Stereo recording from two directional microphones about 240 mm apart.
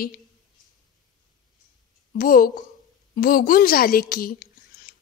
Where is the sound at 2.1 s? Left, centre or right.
Left.